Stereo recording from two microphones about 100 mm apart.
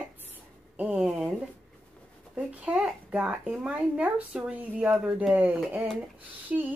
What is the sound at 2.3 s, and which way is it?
A woman's voice, 10° right (ahead or behind).